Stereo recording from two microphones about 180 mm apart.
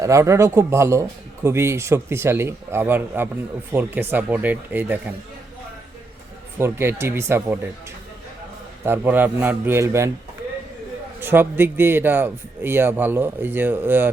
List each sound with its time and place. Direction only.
0.0 s speech: 15° right (ahead or behind)
6.6 s speech: 15° right (ahead or behind)
8.8 s speech: 10° right (ahead or behind)
11.2 s speech: 10° right (ahead or behind)